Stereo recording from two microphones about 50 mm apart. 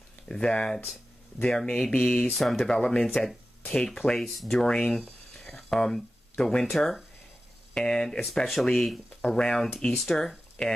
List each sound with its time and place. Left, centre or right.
0.3 s speech: centre
3.1 s speech: centre
3.6 s speech: centre
5.0 s a sound: centre
7.7 s speech: centre
8.3 s speech: centre